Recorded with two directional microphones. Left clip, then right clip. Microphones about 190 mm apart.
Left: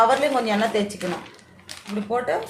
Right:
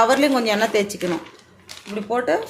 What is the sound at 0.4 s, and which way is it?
Speech, 55° right (ahead or behind).